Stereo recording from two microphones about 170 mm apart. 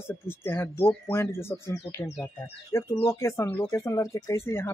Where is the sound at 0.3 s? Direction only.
15° left (ahead or behind).